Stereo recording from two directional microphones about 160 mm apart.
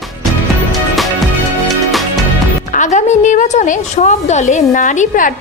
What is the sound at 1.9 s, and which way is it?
Music, centre (ahead or behind).